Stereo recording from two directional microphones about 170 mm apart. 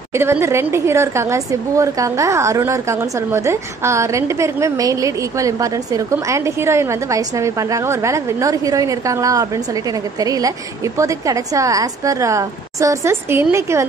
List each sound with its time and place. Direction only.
0.1 s a woman's voice: 15° right (ahead or behind)